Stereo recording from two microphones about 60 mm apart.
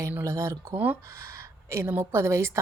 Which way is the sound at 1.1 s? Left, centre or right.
Right.